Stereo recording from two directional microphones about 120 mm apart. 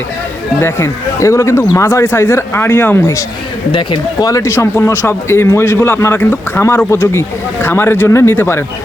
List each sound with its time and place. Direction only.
0.6 s a man's voice: 25° left (ahead or behind)
3.7 s speech: 40° left (ahead or behind)
4.3 s a man's voice: 25° left (ahead or behind)